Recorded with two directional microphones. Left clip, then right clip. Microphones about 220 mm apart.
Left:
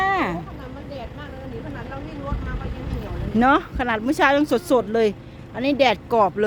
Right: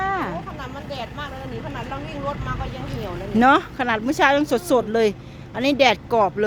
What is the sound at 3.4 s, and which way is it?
Speech, centre (ahead or behind).